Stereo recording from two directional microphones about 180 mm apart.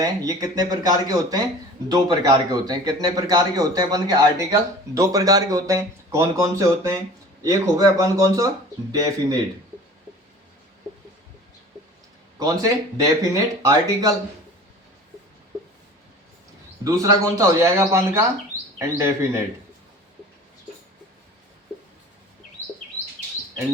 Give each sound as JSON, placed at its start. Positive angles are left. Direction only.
{"t": 0.0, "sound": "a man's voice", "side_deg": -20}
{"t": 12.4, "sound": "a man's voice", "side_deg": -20}
{"t": 16.8, "sound": "speech", "side_deg": -20}